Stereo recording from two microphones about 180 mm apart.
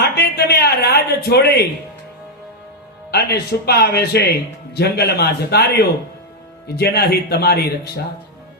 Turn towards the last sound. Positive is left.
turn(degrees=60)  # may be behind; listen again after turning